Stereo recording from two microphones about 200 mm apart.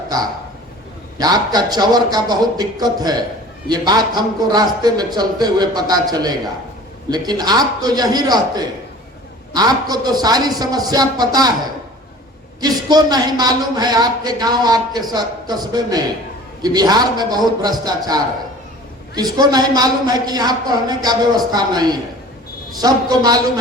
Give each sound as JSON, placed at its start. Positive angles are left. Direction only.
{"t": 0.1, "sound": "a woman's voice", "side_deg": -20}
{"t": 12.5, "sound": "a woman's voice", "side_deg": -20}